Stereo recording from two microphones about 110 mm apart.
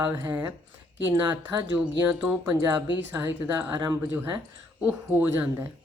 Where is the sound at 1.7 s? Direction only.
10° right (ahead or behind).